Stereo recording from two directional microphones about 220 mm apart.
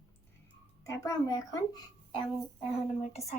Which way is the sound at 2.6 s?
30° left (ahead or behind).